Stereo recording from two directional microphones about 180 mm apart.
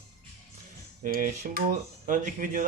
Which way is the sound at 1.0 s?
50° right (ahead or behind).